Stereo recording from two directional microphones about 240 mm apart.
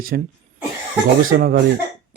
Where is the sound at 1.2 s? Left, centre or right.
Right.